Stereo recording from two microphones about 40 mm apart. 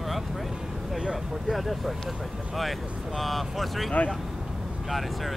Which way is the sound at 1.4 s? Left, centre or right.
Centre.